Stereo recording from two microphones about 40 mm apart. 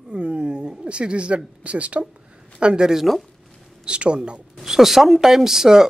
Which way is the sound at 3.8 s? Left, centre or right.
Right.